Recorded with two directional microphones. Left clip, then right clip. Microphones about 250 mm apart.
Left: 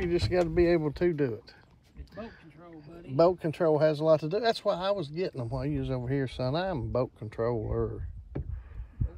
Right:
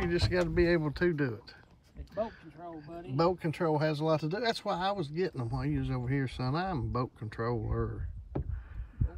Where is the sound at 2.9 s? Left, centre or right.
Centre.